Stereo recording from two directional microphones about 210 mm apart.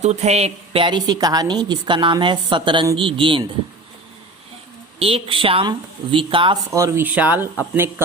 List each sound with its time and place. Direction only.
0.0 s a woman's voice: 30° right (ahead or behind)
4.9 s a woman's voice: 25° right (ahead or behind); by 8.0 s 10° right (ahead or behind)